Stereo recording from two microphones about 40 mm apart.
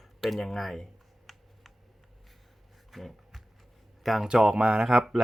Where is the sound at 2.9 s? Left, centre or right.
Centre.